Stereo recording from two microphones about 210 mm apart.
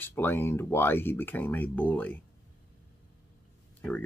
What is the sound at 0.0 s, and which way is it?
Speech, 10° left (ahead or behind).